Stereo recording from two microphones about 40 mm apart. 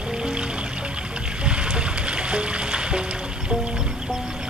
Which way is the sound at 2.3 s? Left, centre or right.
Right.